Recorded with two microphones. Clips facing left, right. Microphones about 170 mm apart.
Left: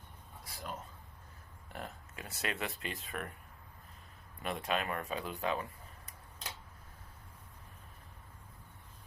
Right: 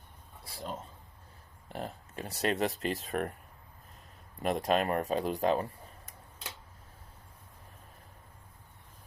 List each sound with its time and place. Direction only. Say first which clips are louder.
0.4 s a sound: right 4 dB; 30° right (ahead or behind)
1.7 s speech: right 6 dB; 35° right (ahead or behind)
4.4 s speech: right 7 dB; 40° right (ahead or behind)